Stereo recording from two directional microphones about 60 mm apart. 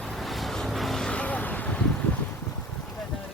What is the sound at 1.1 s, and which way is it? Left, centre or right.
Vehicle, left.